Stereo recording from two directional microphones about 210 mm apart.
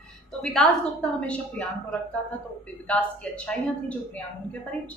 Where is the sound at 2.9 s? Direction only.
5° left (ahead or behind).